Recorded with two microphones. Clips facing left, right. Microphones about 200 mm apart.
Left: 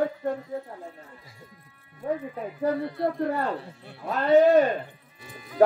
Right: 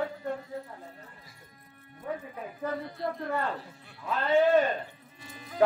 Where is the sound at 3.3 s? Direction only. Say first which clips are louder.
Left 4 dB; 40° left (ahead or behind).